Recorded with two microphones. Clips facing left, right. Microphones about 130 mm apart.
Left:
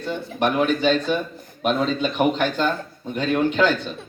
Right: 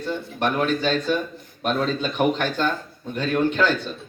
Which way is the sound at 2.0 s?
10° left (ahead or behind).